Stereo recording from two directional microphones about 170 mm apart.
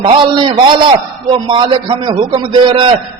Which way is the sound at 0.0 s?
25° right (ahead or behind).